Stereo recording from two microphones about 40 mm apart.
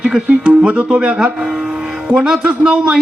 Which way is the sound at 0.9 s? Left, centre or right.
Right.